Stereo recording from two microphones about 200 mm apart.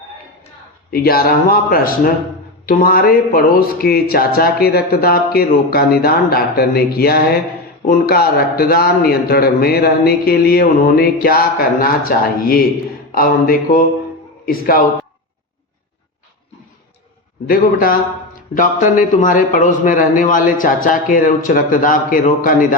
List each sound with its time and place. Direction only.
0.9 s a man's voice: 50° left (ahead or behind)
17.5 s speech: 45° left (ahead or behind)